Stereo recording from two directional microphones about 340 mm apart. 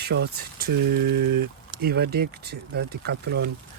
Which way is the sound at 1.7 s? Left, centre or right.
Right.